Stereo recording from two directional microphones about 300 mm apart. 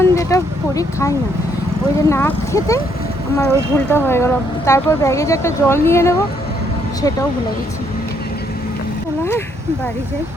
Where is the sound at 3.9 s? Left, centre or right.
Centre.